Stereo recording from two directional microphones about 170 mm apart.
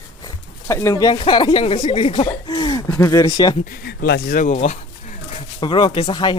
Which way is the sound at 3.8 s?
65° left (ahead or behind).